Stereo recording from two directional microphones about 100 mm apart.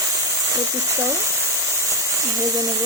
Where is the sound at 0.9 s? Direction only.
30° right (ahead or behind).